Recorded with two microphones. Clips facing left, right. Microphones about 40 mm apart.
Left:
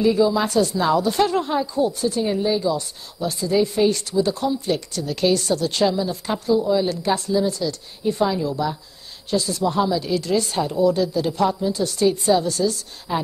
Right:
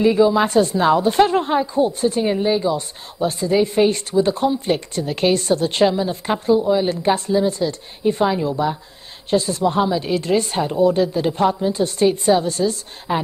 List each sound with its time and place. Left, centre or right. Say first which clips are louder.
0.0 s speech: right 3 dB; right